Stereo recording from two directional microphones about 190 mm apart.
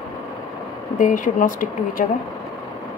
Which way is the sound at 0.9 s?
45° left (ahead or behind).